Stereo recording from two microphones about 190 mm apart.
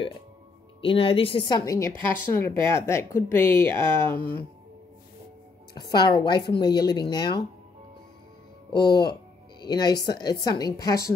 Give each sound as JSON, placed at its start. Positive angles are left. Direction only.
{"t": 0.7, "sound": "speech", "side_deg": 30}
{"t": 5.8, "sound": "a woman's voice", "side_deg": 20}
{"t": 8.7, "sound": "a woman's voice", "side_deg": 25}